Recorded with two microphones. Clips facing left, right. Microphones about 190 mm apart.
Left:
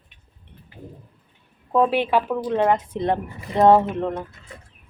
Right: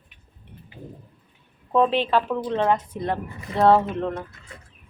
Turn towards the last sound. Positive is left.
turn(degrees=15)  # may be behind; listen again after turning